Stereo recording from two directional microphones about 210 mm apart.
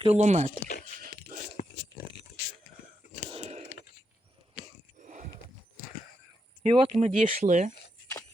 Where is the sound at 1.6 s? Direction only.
40° left (ahead or behind).